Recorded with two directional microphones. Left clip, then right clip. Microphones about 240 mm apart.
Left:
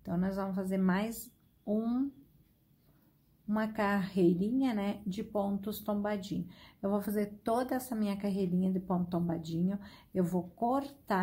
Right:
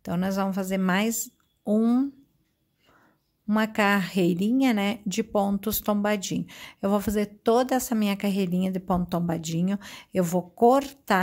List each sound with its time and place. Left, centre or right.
0.0 s a woman's voice: right
3.4 s a woman's voice: right